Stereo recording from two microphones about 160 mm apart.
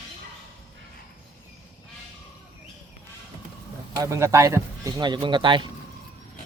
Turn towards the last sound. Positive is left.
turn(degrees=-30)  # may be behind; listen again after turning